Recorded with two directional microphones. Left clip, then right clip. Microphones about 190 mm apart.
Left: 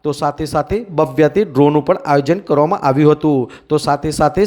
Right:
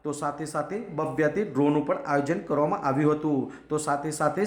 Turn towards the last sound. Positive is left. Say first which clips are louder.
# left 11 dB
turn(degrees=35)  # may be behind; listen again after turning